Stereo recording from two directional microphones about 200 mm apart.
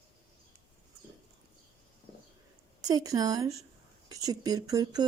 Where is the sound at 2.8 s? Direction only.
20° right (ahead or behind).